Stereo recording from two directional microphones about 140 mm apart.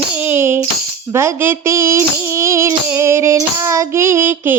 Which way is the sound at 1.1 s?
20° right (ahead or behind).